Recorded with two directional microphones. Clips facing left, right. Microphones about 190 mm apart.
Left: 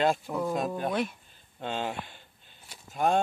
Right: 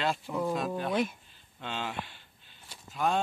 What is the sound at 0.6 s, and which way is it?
Speech, 45° left (ahead or behind).